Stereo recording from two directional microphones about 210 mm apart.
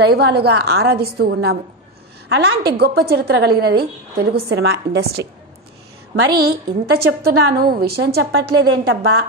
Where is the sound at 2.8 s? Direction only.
50° right (ahead or behind).